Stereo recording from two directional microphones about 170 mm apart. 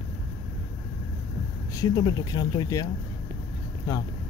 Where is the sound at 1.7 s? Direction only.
25° left (ahead or behind).